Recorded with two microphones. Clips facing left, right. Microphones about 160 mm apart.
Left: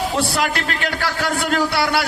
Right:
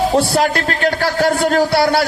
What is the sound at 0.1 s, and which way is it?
A man's voice, 40° right (ahead or behind).